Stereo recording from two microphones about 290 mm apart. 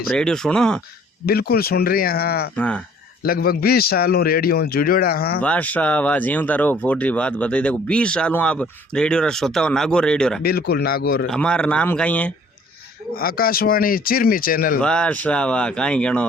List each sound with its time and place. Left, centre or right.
0.1 s speech: centre
1.2 s a man's voice: left
2.6 s speech: centre
3.2 s a man's voice: left
5.4 s speech: centre
10.4 s a man's voice: left
11.3 s speech: centre
13.1 s a man's voice: left
14.8 s speech: centre